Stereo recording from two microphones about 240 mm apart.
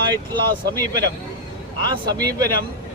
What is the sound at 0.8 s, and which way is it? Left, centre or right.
Speech, centre.